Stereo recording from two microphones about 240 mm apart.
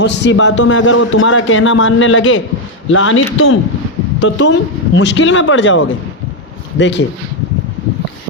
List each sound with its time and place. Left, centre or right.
0.0 s a man's voice: left
4.2 s a man's voice: left